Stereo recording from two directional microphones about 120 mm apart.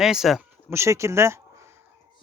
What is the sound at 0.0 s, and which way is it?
Speech, 5° right (ahead or behind).